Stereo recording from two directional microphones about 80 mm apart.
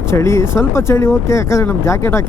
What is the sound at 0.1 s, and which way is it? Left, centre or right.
Speech, left.